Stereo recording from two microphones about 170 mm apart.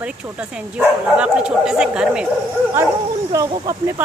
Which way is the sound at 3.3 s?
20° right (ahead or behind).